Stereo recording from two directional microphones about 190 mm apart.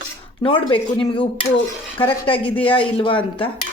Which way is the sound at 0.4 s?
25° left (ahead or behind).